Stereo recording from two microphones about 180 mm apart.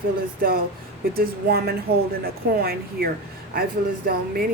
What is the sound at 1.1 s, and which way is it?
Speech, 60° right (ahead or behind).